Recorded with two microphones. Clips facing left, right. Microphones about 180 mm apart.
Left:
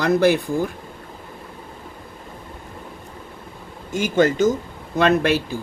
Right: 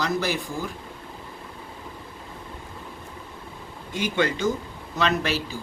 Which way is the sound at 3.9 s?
45° left (ahead or behind).